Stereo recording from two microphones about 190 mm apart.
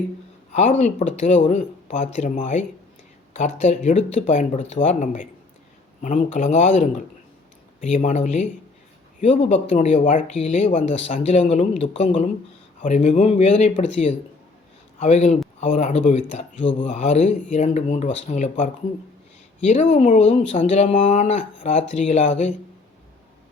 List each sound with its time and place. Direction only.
0.5 s speech: 35° left (ahead or behind)